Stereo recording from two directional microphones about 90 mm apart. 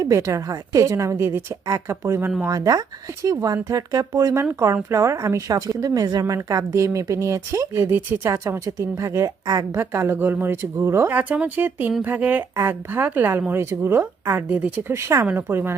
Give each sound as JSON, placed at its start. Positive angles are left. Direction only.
{"t": 0.0, "sound": "speech", "side_deg": -35}
{"t": 9.8, "sound": "speech", "side_deg": -30}
{"t": 11.1, "sound": "speech", "side_deg": -15}
{"t": 14.9, "sound": "speech", "side_deg": -30}